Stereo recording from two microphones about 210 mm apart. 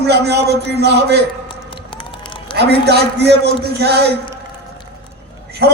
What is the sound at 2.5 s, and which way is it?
Speech, 50° right (ahead or behind).